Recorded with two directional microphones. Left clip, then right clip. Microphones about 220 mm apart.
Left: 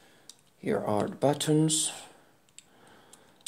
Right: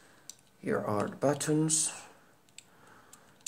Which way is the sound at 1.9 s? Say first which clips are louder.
Left 3 dB; 35° left (ahead or behind).